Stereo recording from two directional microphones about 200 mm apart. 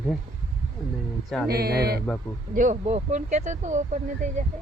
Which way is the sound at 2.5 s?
40° right (ahead or behind).